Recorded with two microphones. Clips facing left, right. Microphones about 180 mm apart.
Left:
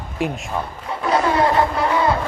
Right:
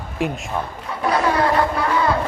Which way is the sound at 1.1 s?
25° left (ahead or behind).